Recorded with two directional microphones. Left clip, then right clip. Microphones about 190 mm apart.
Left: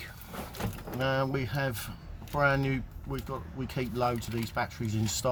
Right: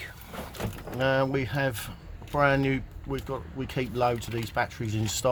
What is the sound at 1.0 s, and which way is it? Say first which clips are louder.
Speech: right 5 dB; 20° right (ahead or behind).